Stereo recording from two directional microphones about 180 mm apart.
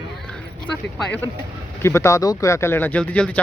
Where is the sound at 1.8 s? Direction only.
15° left (ahead or behind).